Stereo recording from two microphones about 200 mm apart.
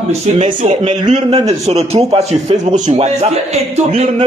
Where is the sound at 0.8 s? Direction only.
25° right (ahead or behind).